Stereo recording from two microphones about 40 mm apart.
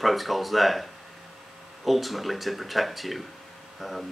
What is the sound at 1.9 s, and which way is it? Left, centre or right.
Speech, centre.